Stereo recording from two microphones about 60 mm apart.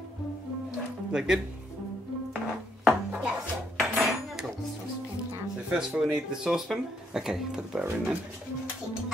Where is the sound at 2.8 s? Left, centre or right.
Centre.